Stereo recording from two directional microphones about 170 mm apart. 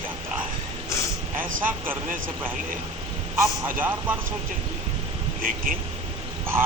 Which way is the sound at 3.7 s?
10° right (ahead or behind).